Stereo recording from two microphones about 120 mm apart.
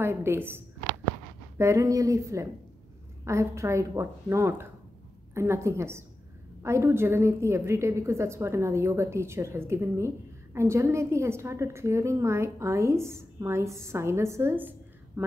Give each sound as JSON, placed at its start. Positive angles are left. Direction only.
{"t": 0.0, "sound": "a woman's voice", "side_deg": -20}